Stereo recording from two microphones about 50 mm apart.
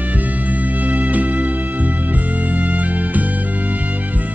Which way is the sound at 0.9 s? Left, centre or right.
Right.